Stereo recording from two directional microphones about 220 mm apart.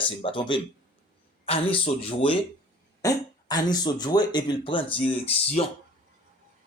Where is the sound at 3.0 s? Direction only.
15° left (ahead or behind).